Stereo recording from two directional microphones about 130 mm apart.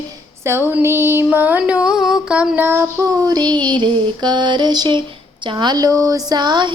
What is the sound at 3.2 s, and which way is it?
Speech, 30° right (ahead or behind).